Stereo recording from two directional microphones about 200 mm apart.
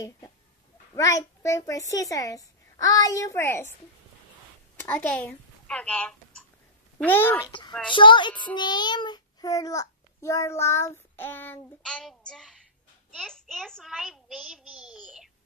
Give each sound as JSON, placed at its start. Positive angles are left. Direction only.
{"t": 0.9, "sound": "child singing", "side_deg": 15}
{"t": 4.7, "sound": "speech", "side_deg": 10}
{"t": 7.0, "sound": "child singing", "side_deg": 10}
{"t": 12.3, "sound": "a child's voice", "side_deg": 0}